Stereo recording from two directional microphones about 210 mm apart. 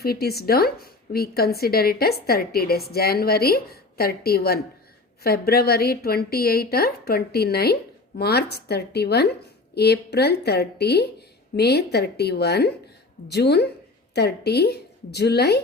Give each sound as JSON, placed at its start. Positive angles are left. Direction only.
{"t": 0.0, "sound": "a woman's voice", "side_deg": 45}